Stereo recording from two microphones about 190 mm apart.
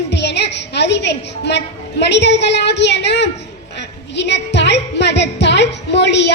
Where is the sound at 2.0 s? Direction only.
65° left (ahead or behind).